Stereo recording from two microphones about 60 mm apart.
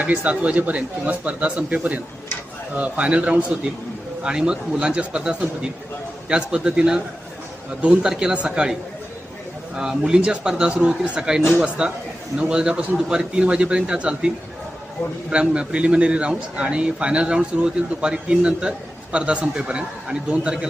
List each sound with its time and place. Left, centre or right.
0.0 s a man's voice: right
8.0 s a man's voice: centre
9.7 s a man's voice: centre